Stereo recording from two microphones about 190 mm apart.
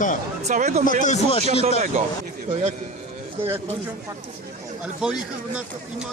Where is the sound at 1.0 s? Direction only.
35° left (ahead or behind).